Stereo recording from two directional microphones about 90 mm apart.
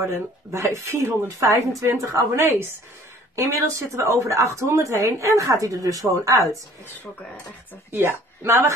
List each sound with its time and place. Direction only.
0.0 s a woman's voice: 30° right (ahead or behind)
7.9 s speech: 25° right (ahead or behind)